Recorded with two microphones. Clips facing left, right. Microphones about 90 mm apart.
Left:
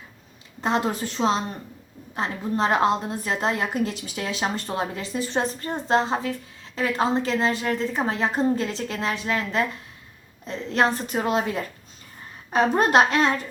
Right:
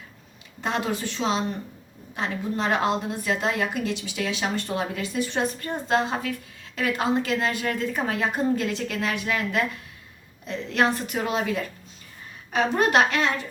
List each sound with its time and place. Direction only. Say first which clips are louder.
0.6 s a woman's voice: left 3 dB; 35° left (ahead or behind)